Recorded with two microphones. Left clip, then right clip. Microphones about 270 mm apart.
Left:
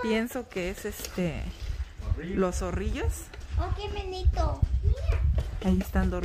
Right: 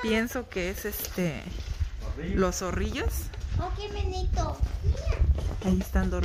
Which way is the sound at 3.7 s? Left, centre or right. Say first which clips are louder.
Even; left.